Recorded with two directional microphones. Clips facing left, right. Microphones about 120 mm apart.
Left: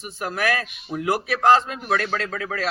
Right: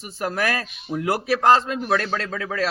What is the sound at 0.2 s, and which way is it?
A man's voice, 35° right (ahead or behind).